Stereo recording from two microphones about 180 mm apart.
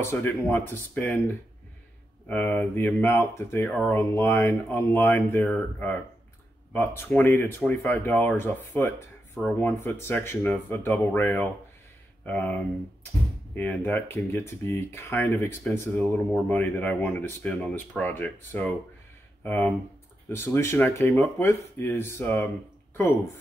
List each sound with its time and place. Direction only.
0.0 s speech: 15° left (ahead or behind)
2.2 s speech: 10° left (ahead or behind)
13.6 s speech: 10° left (ahead or behind)